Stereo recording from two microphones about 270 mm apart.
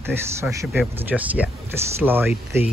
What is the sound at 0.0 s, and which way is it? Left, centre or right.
Speech, centre.